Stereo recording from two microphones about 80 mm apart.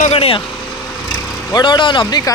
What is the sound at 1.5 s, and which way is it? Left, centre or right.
Speech, left.